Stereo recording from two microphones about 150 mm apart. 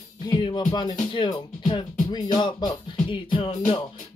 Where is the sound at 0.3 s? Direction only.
30° left (ahead or behind).